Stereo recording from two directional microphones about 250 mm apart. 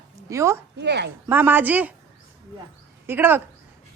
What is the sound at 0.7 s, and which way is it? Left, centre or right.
Speech, right.